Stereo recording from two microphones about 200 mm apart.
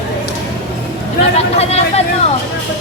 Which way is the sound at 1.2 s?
30° left (ahead or behind).